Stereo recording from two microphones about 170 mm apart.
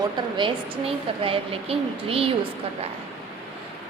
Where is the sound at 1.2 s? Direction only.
35° right (ahead or behind).